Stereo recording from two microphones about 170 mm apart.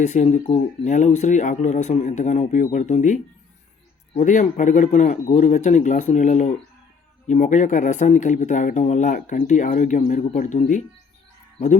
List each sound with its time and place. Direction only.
0.0 s speech: 45° left (ahead or behind)